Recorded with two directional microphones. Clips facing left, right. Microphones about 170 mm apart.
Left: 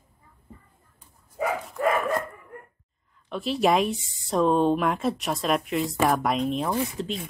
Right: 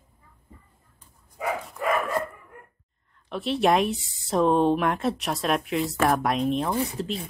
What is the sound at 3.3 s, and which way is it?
Speech, centre (ahead or behind).